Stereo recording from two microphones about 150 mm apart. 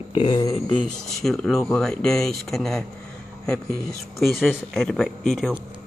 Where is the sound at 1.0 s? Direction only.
Centre (ahead or behind).